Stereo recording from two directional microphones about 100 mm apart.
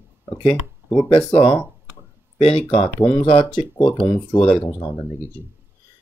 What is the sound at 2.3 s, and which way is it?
Speech, 75° left (ahead or behind).